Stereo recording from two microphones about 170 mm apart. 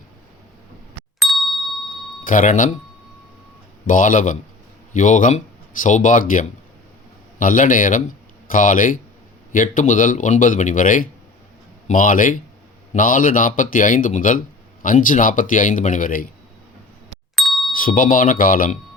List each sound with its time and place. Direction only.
1.2 s ding: centre (ahead or behind)
2.2 s speech: 55° left (ahead or behind)
3.8 s speech: 50° left (ahead or behind)
17.3 s a sound: centre (ahead or behind)
17.7 s speech: 55° left (ahead or behind)